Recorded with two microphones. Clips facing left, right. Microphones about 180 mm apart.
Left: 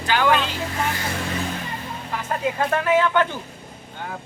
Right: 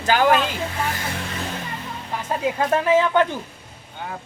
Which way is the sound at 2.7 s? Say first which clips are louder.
Right 2 dB; 25° right (ahead or behind).